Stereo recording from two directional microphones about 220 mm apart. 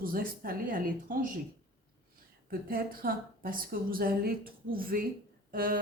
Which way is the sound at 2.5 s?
40° right (ahead or behind).